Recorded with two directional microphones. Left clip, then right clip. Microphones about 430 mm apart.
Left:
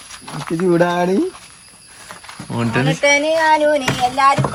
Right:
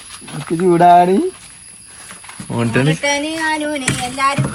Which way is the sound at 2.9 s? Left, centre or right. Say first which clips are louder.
Left 4 dB; left.